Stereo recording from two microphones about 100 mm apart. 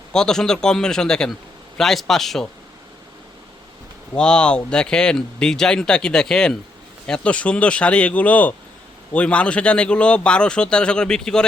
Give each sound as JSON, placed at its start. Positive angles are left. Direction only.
{"t": 0.1, "sound": "a man's voice", "side_deg": 5}
{"t": 4.1, "sound": "speech", "side_deg": 10}